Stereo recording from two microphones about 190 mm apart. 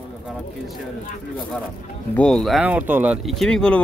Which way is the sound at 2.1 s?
5° left (ahead or behind).